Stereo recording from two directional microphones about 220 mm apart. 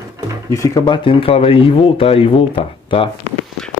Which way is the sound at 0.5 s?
15° left (ahead or behind).